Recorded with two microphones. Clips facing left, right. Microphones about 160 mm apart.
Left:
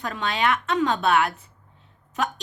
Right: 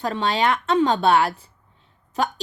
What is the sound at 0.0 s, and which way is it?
Speech, 35° right (ahead or behind).